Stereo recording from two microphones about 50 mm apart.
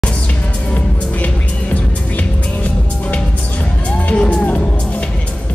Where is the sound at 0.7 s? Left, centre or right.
Left.